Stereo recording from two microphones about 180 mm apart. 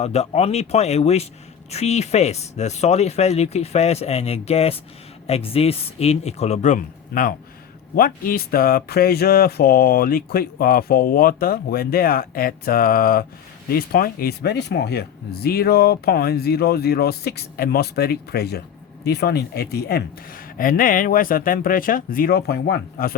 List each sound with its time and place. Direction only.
0.0 s a man's voice: 35° left (ahead or behind); by 23.1 s 60° left (ahead or behind)